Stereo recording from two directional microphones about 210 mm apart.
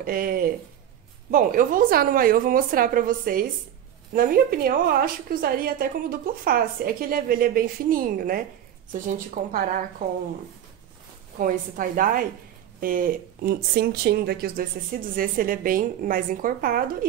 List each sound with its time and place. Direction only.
0.0 s a woman's voice: 45° right (ahead or behind)
11.3 s a woman's voice: 40° right (ahead or behind)